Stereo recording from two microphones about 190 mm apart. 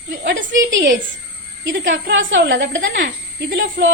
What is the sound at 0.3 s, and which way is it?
A woman's voice, 75° right (ahead or behind).